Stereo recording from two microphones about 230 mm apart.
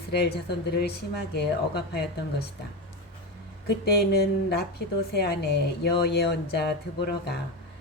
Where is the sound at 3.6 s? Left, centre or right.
Left.